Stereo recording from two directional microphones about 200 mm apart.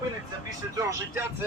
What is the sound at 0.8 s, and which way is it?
Speech, 15° right (ahead or behind).